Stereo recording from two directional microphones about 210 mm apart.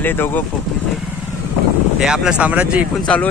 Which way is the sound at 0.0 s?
10° left (ahead or behind).